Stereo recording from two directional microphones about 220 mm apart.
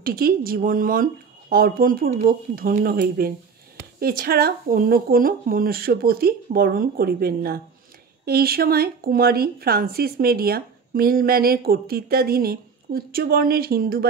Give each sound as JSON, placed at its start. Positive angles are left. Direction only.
{"t": 0.0, "sound": "speech", "side_deg": -45}